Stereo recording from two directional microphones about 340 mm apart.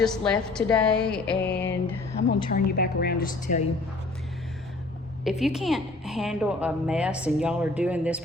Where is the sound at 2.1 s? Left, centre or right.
Left.